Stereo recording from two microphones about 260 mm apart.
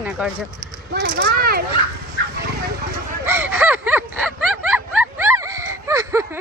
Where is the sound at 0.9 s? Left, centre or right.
Right.